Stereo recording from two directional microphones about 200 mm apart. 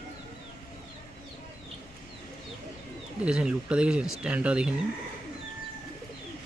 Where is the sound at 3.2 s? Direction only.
5° right (ahead or behind).